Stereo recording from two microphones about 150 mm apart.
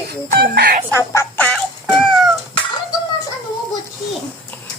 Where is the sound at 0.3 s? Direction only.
85° right.